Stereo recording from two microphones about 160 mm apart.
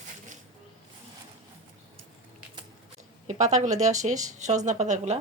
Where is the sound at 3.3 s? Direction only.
45° right (ahead or behind).